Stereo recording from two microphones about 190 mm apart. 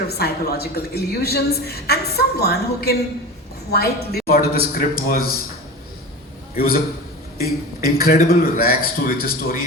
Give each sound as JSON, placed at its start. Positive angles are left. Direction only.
{"t": 0.2, "sound": "a woman's voice", "side_deg": 55}
{"t": 6.6, "sound": "a man's voice", "side_deg": 50}